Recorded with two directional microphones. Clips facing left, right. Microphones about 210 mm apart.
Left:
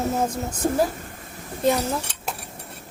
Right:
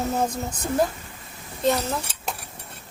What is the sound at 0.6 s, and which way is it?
Speech, 50° left (ahead or behind).